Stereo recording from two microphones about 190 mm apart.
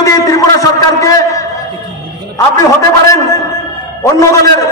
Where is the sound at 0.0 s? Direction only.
20° left (ahead or behind).